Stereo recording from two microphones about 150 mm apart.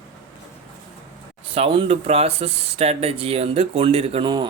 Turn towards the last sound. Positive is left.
turn(degrees=-35)  # may be behind; listen again after turning